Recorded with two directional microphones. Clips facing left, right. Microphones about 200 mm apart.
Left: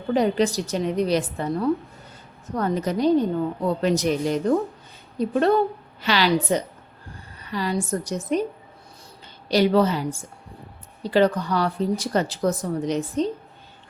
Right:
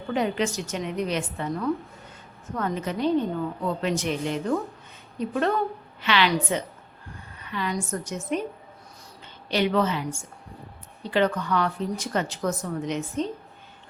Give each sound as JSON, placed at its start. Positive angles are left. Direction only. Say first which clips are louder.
{"t": 0.1, "sound": "speech", "louder": "left 5 dB", "side_deg": 35}
{"t": 9.5, "sound": "speech", "louder": "left 5 dB", "side_deg": 35}